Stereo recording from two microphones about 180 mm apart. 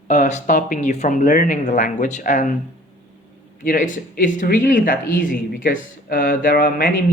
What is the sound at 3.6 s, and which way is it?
A man's voice, 50° left (ahead or behind).